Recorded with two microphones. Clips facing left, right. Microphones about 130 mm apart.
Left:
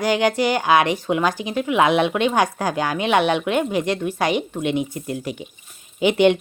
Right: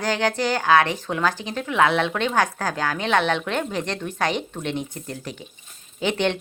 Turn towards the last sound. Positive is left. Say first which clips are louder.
# left 7 dB
turn(degrees=15)  # may be behind; listen again after turning